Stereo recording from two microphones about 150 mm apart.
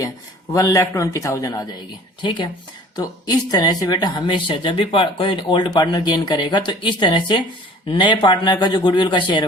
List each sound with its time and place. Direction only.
0.5 s a man's voice: 20° left (ahead or behind)
2.9 s speech: 25° left (ahead or behind)